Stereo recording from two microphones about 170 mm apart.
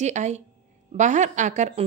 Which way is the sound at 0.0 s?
45° right (ahead or behind).